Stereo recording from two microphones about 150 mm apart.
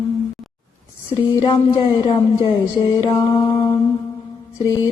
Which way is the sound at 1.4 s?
35° left (ahead or behind).